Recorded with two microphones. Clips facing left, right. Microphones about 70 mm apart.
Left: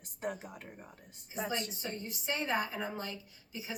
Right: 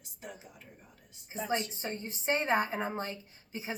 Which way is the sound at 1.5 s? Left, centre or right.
Right.